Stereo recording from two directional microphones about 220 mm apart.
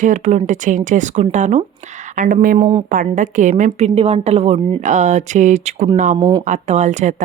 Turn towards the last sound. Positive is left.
turn(degrees=-35)  # may be behind; listen again after turning